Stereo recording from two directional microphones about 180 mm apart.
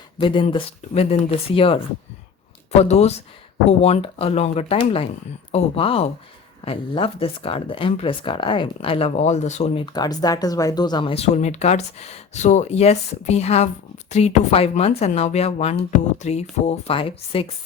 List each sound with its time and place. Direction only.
0.2 s speech: 25° left (ahead or behind)
9.8 s speech: 20° left (ahead or behind)